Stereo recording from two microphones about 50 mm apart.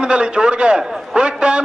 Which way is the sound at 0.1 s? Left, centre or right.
Centre.